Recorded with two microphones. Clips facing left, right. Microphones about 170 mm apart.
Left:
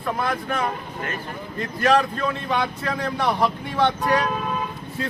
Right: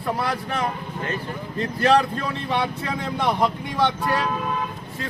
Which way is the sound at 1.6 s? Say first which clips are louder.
Right 1 dB; 30° right (ahead or behind).